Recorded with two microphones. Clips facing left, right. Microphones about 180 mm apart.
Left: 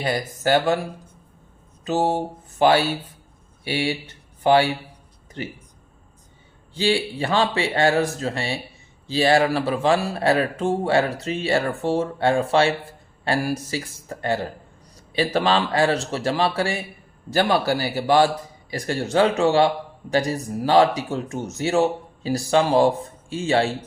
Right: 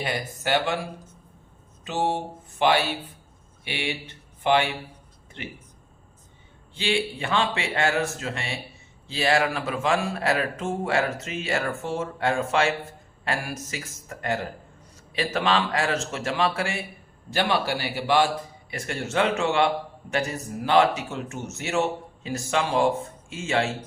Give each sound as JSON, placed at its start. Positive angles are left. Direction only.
{"t": 0.0, "sound": "speech", "side_deg": 40}
{"t": 1.8, "sound": "a sound", "side_deg": 40}
{"t": 3.6, "sound": "speech", "side_deg": 40}
{"t": 6.7, "sound": "speech", "side_deg": 35}